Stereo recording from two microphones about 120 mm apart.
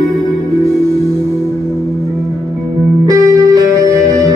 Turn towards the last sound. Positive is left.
turn(degrees=-30)  # may be behind; listen again after turning